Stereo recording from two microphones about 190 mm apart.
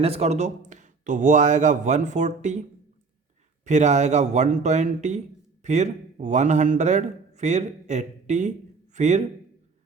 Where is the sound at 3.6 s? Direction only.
40° right (ahead or behind).